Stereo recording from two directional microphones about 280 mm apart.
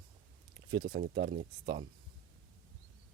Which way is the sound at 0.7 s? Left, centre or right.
Right.